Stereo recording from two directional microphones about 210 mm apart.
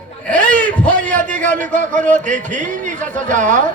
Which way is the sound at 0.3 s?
5° left (ahead or behind).